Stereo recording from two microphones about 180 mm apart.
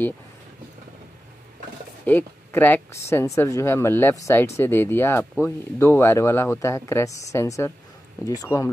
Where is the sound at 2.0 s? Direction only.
10° left (ahead or behind).